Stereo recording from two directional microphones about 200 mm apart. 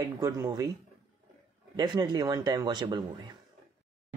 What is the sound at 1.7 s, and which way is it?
Speech, 20° right (ahead or behind).